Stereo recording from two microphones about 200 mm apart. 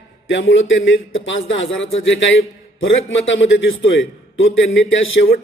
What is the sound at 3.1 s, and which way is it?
A man's voice, 70° left (ahead or behind).